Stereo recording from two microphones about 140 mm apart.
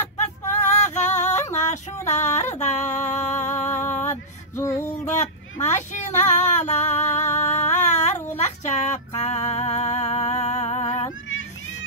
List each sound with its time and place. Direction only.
0.5 s female singing: 60° left (ahead or behind)
2.0 s a sound: 60° left (ahead or behind)
4.6 s female singing: 20° left (ahead or behind)
4.8 s child singing: 60° left (ahead or behind)
5.6 s female singing: 60° left (ahead or behind)
8.4 s a sound: 55° left (ahead or behind)
9.5 s music: 55° left (ahead or behind)